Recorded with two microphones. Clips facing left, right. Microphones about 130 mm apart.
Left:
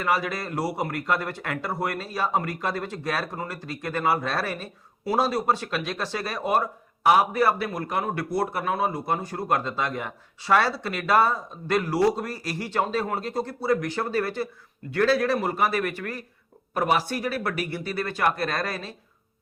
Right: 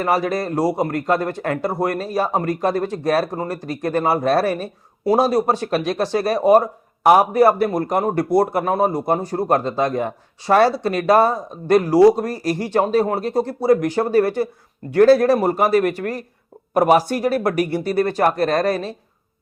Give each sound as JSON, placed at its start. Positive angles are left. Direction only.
{"t": 0.0, "sound": "speech", "side_deg": -40}